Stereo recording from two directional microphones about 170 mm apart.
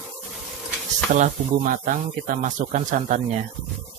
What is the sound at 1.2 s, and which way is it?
Speech, 55° right (ahead or behind).